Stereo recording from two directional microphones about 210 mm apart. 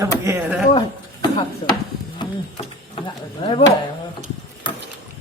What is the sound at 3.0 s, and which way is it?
Speech, 25° left (ahead or behind).